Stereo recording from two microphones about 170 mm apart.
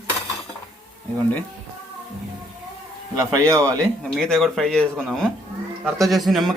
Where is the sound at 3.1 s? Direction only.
20° right (ahead or behind).